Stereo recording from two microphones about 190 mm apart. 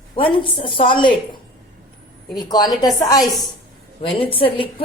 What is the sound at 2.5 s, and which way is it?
Speech, 20° left (ahead or behind).